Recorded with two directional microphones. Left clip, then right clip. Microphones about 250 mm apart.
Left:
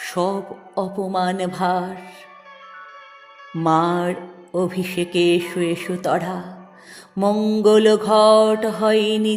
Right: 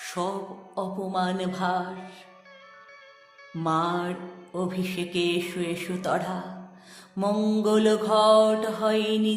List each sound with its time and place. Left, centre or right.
0.0 s music: left
3.5 s music: left